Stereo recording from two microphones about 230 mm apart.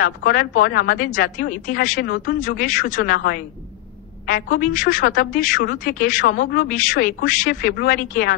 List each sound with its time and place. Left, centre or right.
0.0 s a woman's voice: left